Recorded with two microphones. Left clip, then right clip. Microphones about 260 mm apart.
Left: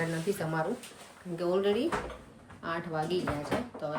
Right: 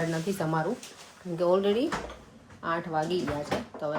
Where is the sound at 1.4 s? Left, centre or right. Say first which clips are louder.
Right 4 dB; centre.